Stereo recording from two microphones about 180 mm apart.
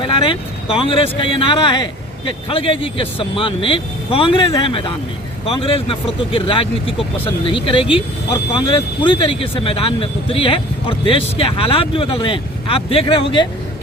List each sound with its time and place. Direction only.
0.0 s speech: 30° left (ahead or behind)